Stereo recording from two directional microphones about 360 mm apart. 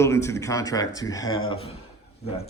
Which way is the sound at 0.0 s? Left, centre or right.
Centre.